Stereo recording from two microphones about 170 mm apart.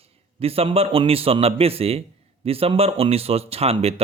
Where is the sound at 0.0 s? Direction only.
35° right (ahead or behind).